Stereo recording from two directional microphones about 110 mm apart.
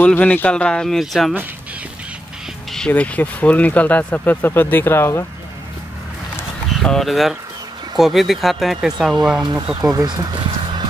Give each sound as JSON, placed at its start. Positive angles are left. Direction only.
{"t": 0.0, "sound": "speech", "side_deg": 10}
{"t": 2.9, "sound": "speech", "side_deg": 15}
{"t": 6.8, "sound": "speech", "side_deg": 5}
{"t": 9.4, "sound": "speech", "side_deg": -40}